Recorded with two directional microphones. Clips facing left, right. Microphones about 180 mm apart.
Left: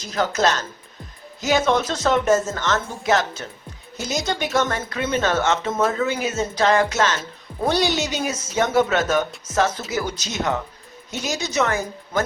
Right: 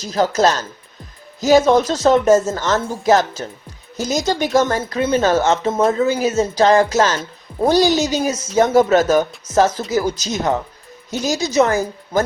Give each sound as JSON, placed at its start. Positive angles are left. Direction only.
{"t": 0.0, "sound": "speech", "side_deg": -35}